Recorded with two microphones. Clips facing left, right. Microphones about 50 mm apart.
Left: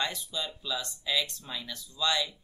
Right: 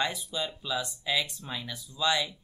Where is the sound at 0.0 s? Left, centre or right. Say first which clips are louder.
Right 2 dB; centre.